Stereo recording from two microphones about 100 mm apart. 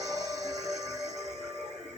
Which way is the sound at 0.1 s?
35° right (ahead or behind).